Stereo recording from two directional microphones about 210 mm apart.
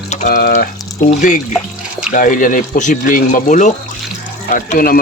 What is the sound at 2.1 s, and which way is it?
Speech, 40° left (ahead or behind).